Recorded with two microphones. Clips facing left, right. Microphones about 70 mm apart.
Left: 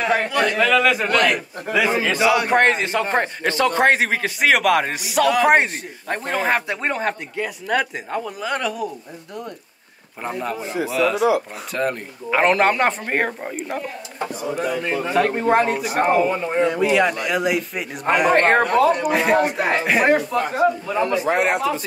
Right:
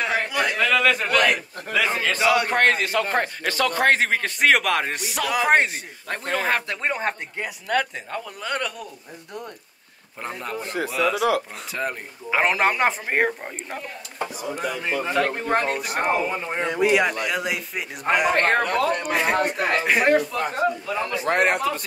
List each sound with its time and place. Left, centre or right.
0.0 s speech: centre
2.6 s a man's voice: left
3.9 s speech: centre
6.0 s a man's voice: left
6.4 s speech: centre
10.2 s speech: centre
18.4 s a man's voice: left
19.0 s speech: centre
19.8 s speech: centre